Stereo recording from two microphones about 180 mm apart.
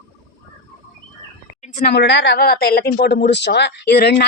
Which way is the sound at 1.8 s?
65° left (ahead or behind).